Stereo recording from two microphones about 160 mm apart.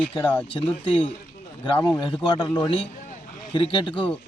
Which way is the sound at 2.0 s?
30° left (ahead or behind).